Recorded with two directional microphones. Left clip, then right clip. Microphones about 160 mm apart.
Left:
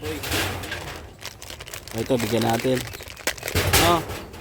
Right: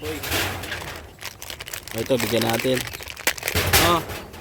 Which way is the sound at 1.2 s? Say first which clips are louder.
Right 4 dB; 30° right (ahead or behind).